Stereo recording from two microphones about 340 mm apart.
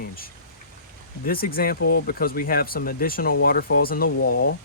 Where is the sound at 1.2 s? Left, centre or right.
Left.